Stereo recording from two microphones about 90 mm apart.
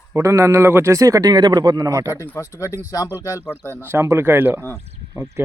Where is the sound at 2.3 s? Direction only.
35° left (ahead or behind).